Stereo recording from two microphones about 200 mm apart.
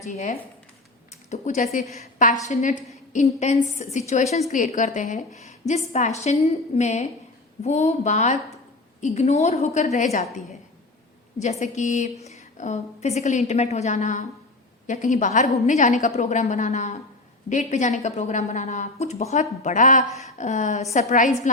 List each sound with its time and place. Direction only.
0.0 s a woman's voice: 40° left (ahead or behind)
11.6 s a woman's voice: 35° left (ahead or behind)